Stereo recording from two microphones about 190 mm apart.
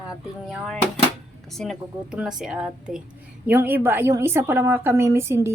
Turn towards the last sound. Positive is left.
turn(degrees=-15)  # may be behind; listen again after turning